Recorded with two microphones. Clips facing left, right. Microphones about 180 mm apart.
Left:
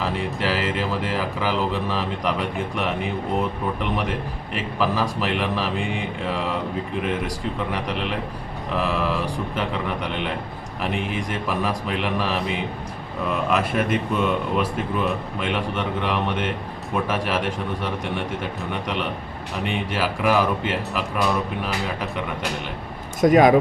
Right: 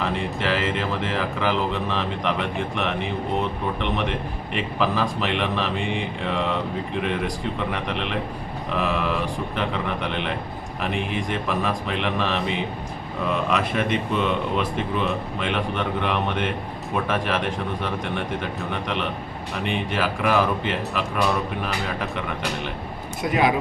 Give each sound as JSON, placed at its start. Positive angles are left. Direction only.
{"t": 0.0, "sound": "speech", "side_deg": 5}
{"t": 18.7, "sound": "speech", "side_deg": 0}
{"t": 23.2, "sound": "speech", "side_deg": 45}